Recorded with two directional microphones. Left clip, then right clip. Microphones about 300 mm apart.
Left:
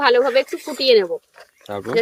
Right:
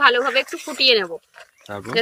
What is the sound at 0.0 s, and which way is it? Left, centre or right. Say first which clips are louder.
Speech: left 1 dB; centre.